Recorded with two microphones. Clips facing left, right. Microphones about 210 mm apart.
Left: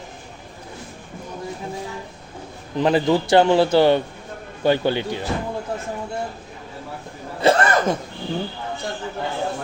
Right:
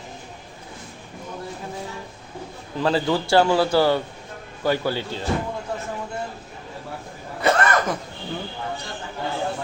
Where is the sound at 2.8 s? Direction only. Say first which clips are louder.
Left 4 dB; 20° left (ahead or behind).